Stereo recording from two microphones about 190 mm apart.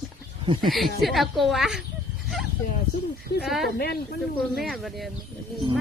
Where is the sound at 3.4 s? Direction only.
Centre (ahead or behind).